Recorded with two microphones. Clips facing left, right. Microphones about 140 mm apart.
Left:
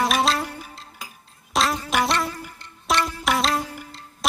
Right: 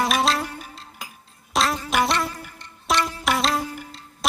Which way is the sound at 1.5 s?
Centre (ahead or behind).